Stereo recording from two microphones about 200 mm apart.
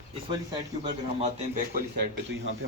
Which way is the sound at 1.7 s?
55° right (ahead or behind).